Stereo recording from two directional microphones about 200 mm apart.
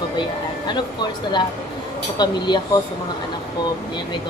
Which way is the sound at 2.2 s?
20° left (ahead or behind).